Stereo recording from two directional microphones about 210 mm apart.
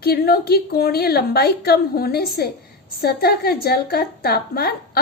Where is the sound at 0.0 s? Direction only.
45° left (ahead or behind).